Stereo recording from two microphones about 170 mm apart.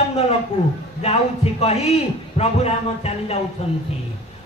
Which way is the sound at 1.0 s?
35° left (ahead or behind).